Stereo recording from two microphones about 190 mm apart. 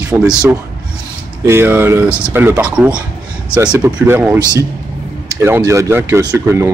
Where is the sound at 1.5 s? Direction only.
10° right (ahead or behind).